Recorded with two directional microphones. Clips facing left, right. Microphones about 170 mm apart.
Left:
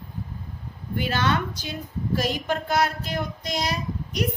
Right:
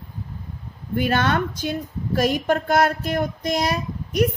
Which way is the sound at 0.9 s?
55° right (ahead or behind).